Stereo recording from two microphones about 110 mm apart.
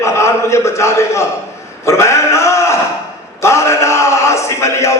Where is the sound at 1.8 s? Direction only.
25° left (ahead or behind).